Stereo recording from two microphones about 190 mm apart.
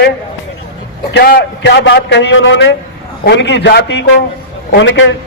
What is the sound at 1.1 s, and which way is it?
A man's voice, 60° left (ahead or behind).